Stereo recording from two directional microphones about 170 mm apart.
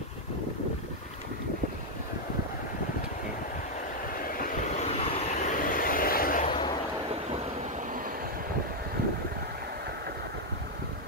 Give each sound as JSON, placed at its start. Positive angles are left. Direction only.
{"t": 4.1, "sound": "vehicle", "side_deg": 55}
{"t": 4.7, "sound": "vehicle", "side_deg": 35}
{"t": 6.4, "sound": "a sound", "side_deg": 30}